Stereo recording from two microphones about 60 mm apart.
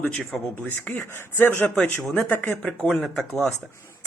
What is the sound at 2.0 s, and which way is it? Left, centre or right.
Speech, centre.